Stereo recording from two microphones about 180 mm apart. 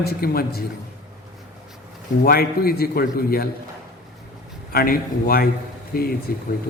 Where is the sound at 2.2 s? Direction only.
55° left (ahead or behind).